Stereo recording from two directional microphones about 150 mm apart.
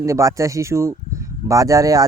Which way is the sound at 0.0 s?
20° right (ahead or behind).